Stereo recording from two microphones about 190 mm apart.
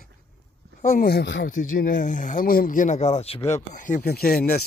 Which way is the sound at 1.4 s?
45° left (ahead or behind).